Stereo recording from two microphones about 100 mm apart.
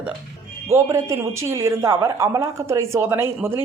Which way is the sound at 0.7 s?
30° right (ahead or behind).